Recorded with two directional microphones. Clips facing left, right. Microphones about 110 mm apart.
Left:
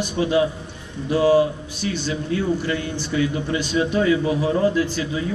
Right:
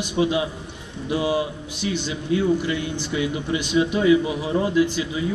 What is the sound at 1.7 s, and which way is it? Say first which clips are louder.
Speech: left 1 dB; 20° right (ahead or behind).